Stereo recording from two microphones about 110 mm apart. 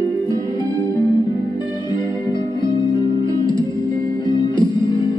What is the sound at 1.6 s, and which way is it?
Music, 45° left (ahead or behind).